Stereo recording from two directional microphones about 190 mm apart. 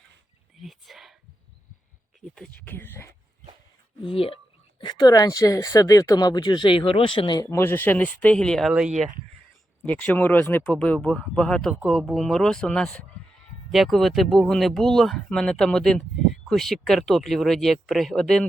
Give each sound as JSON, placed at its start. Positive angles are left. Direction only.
{"t": 0.6, "sound": "speech", "side_deg": 0}
{"t": 2.3, "sound": "speech", "side_deg": 5}
{"t": 4.1, "sound": "speech", "side_deg": 30}
{"t": 9.8, "sound": "speech", "side_deg": 10}